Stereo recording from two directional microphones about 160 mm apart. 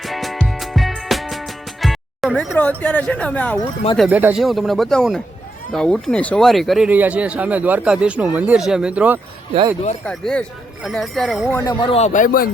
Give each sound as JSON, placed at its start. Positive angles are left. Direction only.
{"t": 0.0, "sound": "music", "side_deg": 0}
{"t": 3.1, "sound": "speech", "side_deg": 10}
{"t": 4.1, "sound": "speech", "side_deg": -10}
{"t": 10.1, "sound": "speech", "side_deg": 5}
{"t": 11.5, "sound": "speech", "side_deg": 20}
{"t": 11.9, "sound": "speech", "side_deg": 45}